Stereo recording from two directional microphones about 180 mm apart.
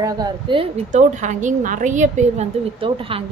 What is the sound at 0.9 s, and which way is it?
A woman's voice, 45° right (ahead or behind).